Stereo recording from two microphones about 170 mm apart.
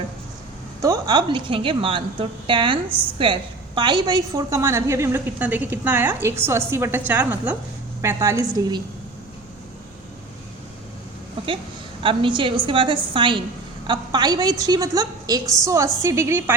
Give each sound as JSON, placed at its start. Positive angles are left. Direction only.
{"t": 0.8, "sound": "a woman's voice", "side_deg": -20}
{"t": 11.4, "sound": "a woman's voice", "side_deg": -30}